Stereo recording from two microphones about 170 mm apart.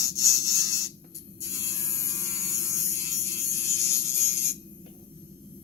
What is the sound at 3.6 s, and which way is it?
Electric shaver, 15° left (ahead or behind).